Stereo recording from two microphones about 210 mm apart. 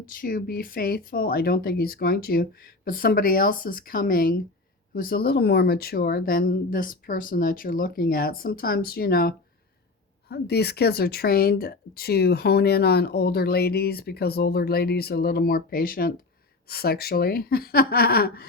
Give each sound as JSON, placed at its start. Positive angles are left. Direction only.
{"t": 0.2, "sound": "speech", "side_deg": 45}